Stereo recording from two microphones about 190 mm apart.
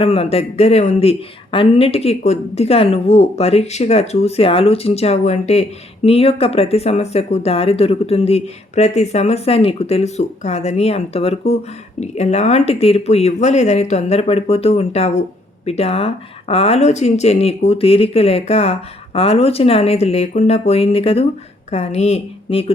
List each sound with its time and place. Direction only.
0.0 s speech: 30° left (ahead or behind)